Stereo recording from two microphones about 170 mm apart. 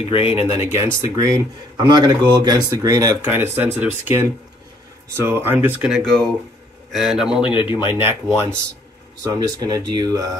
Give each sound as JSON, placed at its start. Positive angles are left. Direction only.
{"t": 0.0, "sound": "speech", "side_deg": 35}
{"t": 0.6, "sound": "a man's voice", "side_deg": -15}
{"t": 7.9, "sound": "speech", "side_deg": -15}